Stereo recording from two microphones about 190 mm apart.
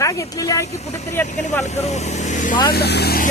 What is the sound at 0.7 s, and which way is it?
Speech, 35° left (ahead or behind).